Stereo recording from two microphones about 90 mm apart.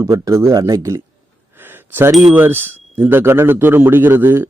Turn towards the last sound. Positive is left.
turn(degrees=-25)  # may be behind; listen again after turning